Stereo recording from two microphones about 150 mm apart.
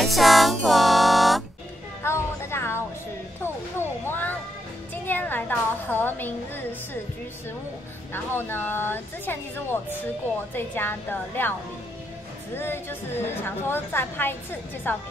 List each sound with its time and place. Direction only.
0.0 s music: centre (ahead or behind)
2.0 s a sound: 15° left (ahead or behind)
4.0 s children playing: 15° left (ahead or behind)
5.0 s a sound: 10° left (ahead or behind)
8.1 s a woman's voice: 15° left (ahead or behind)
12.5 s a woman's voice: 15° left (ahead or behind)